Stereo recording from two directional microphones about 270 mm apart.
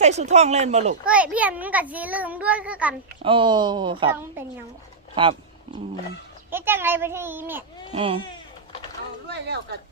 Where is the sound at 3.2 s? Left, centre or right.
Centre.